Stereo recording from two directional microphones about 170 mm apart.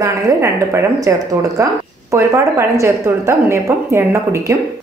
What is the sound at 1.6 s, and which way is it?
A woman's voice, 15° right (ahead or behind).